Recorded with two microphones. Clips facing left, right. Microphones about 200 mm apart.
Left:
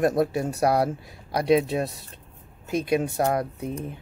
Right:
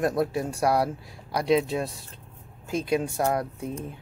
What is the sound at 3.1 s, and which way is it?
Speech, 30° left (ahead or behind).